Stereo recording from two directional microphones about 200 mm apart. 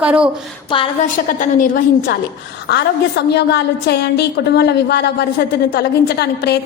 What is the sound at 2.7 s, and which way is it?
A woman's voice, 55° left (ahead or behind).